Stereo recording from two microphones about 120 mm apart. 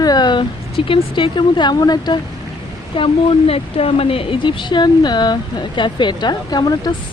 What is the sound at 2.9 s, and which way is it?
A woman's voice, 50° left (ahead or behind).